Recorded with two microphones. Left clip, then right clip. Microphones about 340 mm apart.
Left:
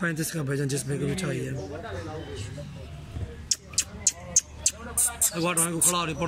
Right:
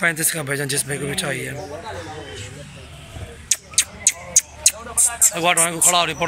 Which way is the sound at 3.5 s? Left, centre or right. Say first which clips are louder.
Right 6 dB; centre.